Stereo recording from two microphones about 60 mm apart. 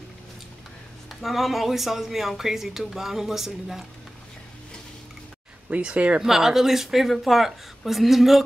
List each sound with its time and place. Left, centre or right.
1.2 s speech: centre
5.7 s speech: centre
6.2 s speech: centre